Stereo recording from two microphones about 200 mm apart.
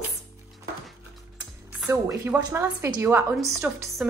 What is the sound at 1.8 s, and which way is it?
A woman's voice, 15° right (ahead or behind).